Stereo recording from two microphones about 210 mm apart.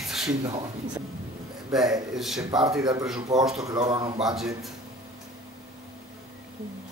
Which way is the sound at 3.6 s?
20° right (ahead or behind).